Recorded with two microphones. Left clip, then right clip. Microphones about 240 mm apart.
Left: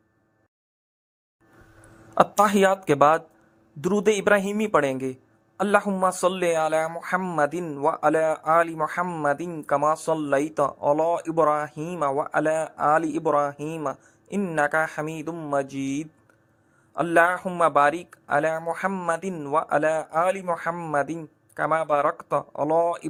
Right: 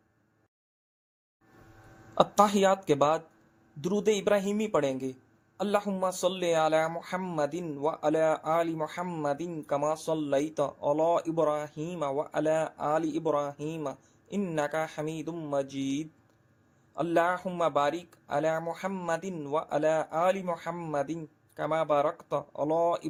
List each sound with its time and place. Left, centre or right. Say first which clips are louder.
2.1 s a man's voice: left 5 dB; left